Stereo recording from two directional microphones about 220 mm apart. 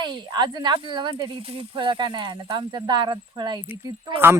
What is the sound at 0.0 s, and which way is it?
Speech, 20° right (ahead or behind).